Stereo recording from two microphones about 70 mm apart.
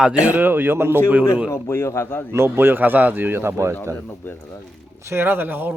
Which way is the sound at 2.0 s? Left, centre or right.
Left.